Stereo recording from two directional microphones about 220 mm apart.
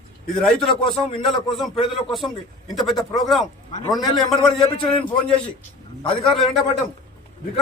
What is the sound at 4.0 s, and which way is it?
A man's voice, 20° left (ahead or behind).